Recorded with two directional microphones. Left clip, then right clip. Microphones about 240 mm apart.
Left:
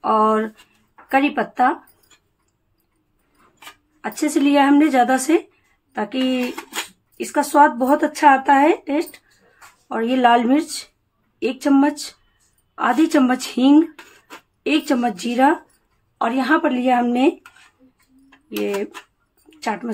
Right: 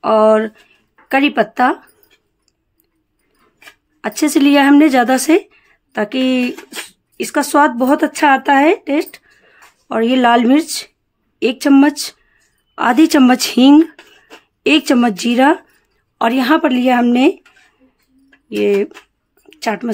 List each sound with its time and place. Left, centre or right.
0.0 s speech: right
4.0 s a woman's voice: right
19.5 s speech: right